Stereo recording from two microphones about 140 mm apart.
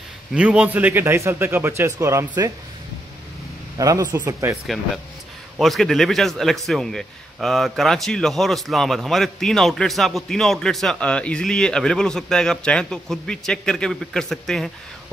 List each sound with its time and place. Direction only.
0.3 s a man's voice: 10° right (ahead or behind)
3.7 s speech: 25° right (ahead or behind)
5.6 s a man's voice: centre (ahead or behind)